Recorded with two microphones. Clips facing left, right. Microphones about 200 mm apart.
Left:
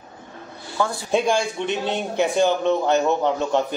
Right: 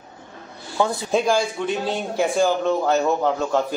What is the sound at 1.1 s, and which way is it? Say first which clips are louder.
A man's voice: even; centre (ahead or behind).